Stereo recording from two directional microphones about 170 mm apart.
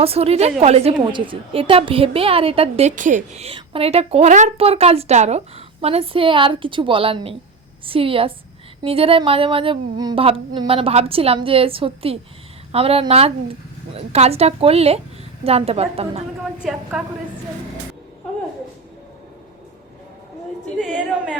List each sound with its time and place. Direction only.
0.0 s a woman's voice: 35° right (ahead or behind)
2.9 s a woman's voice: 50° right (ahead or behind)
16.6 s speech: centre (ahead or behind)
20.7 s speech: 5° right (ahead or behind)